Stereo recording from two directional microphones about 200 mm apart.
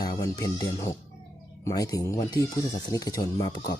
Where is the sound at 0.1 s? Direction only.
15° left (ahead or behind).